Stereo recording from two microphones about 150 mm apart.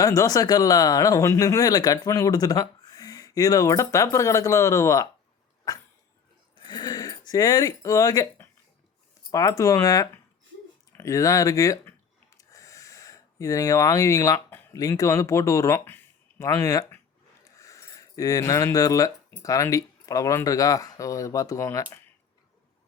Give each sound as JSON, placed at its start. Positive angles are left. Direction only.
{"t": 0.0, "sound": "speech", "side_deg": 20}
{"t": 5.7, "sound": "dog", "side_deg": 25}
{"t": 6.6, "sound": "speech", "side_deg": 30}
{"t": 12.4, "sound": "a sound", "side_deg": 20}
{"t": 17.6, "sound": "speech", "side_deg": 20}